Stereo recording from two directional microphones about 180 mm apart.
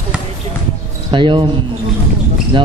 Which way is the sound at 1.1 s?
25° right (ahead or behind).